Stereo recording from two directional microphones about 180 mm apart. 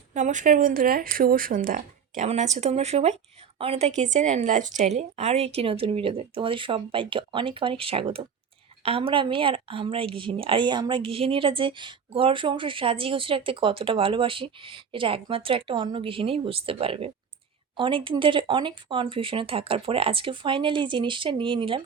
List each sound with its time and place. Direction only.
0.1 s speech: 40° right (ahead or behind)